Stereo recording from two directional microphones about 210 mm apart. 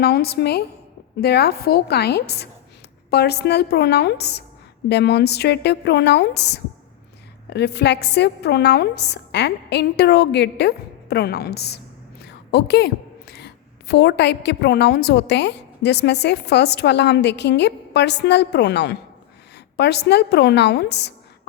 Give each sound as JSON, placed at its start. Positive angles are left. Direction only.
{"t": 0.0, "sound": "a woman's voice", "side_deg": 50}